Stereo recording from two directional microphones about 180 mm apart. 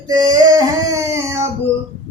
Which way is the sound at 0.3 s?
20° right (ahead or behind).